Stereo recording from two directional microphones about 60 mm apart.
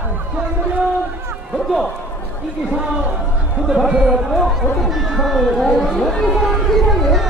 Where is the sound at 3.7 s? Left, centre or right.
Centre.